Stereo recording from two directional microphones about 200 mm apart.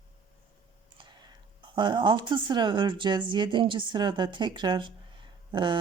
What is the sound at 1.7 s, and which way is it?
Speech, 20° right (ahead or behind).